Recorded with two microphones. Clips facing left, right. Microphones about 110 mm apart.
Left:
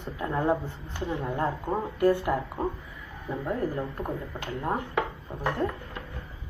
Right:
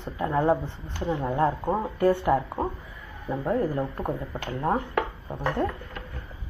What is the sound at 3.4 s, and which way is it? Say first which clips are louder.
Speech: right 4 dB; 25° right (ahead or behind).